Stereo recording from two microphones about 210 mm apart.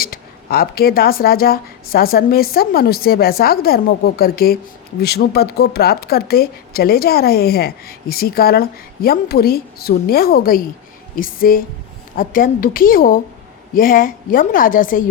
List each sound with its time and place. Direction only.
0.0 s a woman's voice: 45° left (ahead or behind)